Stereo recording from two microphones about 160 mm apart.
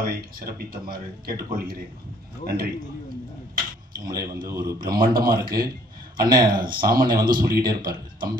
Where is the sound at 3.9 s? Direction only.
65° right (ahead or behind).